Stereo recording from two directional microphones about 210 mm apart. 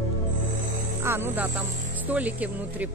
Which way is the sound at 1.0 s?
10° right (ahead or behind).